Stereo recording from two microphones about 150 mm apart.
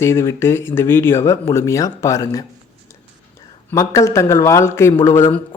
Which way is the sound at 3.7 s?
20° left (ahead or behind).